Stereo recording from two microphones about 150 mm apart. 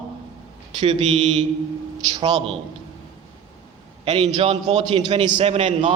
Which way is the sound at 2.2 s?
30° right (ahead or behind).